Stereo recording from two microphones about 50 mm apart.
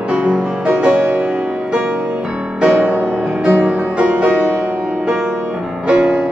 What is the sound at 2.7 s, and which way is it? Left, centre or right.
Music, right.